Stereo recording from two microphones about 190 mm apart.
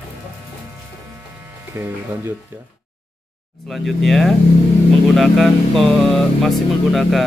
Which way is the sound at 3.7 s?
Centre (ahead or behind).